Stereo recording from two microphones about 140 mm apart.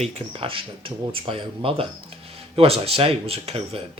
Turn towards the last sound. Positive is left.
turn(degrees=-45)  # may be behind; listen again after turning